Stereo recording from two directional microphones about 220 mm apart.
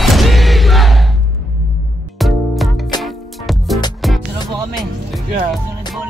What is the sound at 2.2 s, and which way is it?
Music, centre (ahead or behind).